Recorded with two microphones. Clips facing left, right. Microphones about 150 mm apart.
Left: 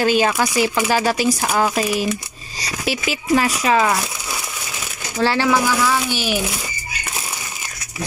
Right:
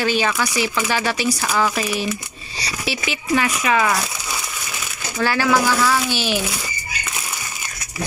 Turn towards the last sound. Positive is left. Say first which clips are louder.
# even
turn(degrees=15)  # may be behind; listen again after turning